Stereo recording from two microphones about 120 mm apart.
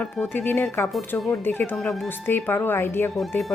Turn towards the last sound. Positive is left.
turn(degrees=15)  # may be behind; listen again after turning